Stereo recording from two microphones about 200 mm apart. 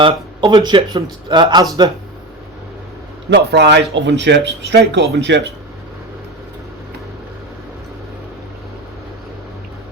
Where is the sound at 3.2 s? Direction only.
60° right (ahead or behind).